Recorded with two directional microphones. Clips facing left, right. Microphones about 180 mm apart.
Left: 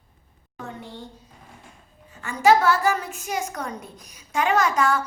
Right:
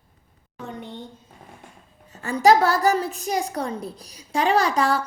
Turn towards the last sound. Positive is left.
turn(degrees=-35)  # may be behind; listen again after turning